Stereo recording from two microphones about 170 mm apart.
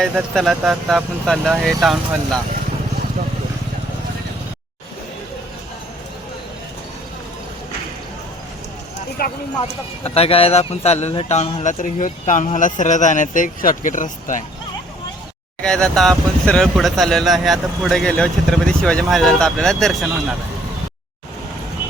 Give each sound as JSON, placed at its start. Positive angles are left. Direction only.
{"t": 0.0, "sound": "speech", "side_deg": 0}
{"t": 9.2, "sound": "speech", "side_deg": 60}
{"t": 9.6, "sound": "speech", "side_deg": 35}
{"t": 11.6, "sound": "speech", "side_deg": 45}
{"t": 15.6, "sound": "speech", "side_deg": 5}